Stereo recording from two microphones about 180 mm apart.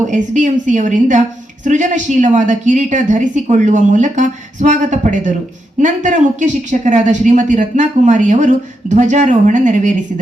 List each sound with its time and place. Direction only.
0.1 s speech: 45° right (ahead or behind)